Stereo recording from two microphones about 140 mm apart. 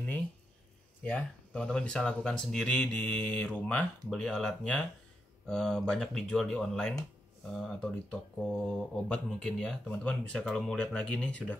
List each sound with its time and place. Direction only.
1.0 s speech: 5° left (ahead or behind)